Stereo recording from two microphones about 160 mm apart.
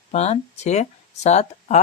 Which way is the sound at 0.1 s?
45° left (ahead or behind).